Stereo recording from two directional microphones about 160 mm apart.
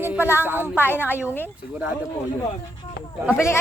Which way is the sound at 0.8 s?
15° left (ahead or behind).